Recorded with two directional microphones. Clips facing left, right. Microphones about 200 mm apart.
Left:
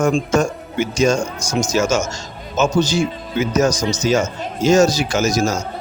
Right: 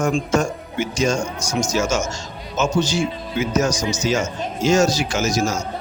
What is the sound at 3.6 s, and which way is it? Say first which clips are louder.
Speech: left 5 dB; 35° left (ahead or behind).